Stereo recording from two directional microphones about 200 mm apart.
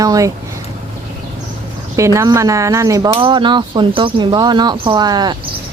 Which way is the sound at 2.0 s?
15° right (ahead or behind).